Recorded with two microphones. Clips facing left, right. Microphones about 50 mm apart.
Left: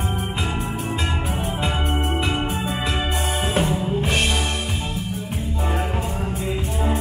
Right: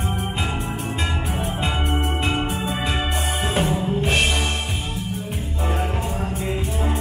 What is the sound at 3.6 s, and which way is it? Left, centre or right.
Music, centre.